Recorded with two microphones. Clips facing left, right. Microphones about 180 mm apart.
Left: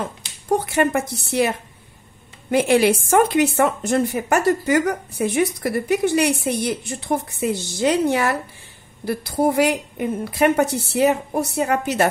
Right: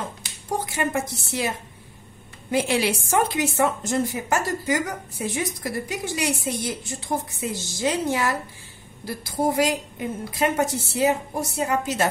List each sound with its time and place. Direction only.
0.5 s a woman's voice: 65° left (ahead or behind)
2.5 s a woman's voice: 55° left (ahead or behind)